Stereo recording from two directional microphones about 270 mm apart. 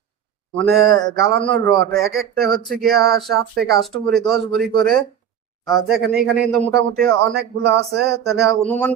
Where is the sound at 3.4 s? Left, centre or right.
Right.